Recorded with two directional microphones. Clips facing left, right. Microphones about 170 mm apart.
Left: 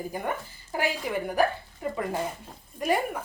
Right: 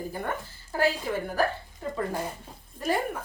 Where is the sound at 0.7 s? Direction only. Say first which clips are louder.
Right 2 dB; 15° left (ahead or behind).